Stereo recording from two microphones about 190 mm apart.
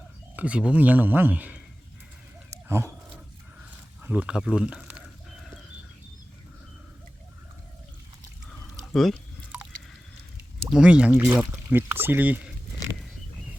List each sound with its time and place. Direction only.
0.3 s speech: 5° right (ahead or behind)
2.5 s a sound: 15° right (ahead or behind)
4.0 s speech: 10° right (ahead or behind)
8.4 s pour: centre (ahead or behind)
10.7 s speech: 5° right (ahead or behind)